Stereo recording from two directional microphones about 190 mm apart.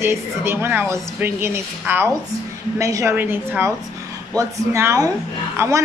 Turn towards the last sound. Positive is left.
turn(degrees=-15)  # may be behind; listen again after turning